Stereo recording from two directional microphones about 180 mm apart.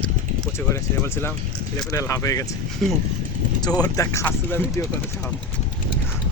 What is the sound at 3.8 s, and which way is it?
Speech, 15° left (ahead or behind).